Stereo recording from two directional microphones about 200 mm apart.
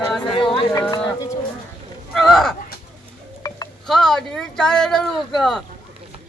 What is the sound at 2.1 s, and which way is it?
Speech, centre (ahead or behind).